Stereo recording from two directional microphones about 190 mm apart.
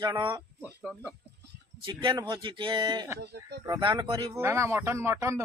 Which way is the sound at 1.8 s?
25° right (ahead or behind).